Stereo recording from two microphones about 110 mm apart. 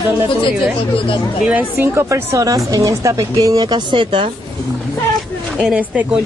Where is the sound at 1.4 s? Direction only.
15° right (ahead or behind); by 4.3 s 50° right (ahead or behind).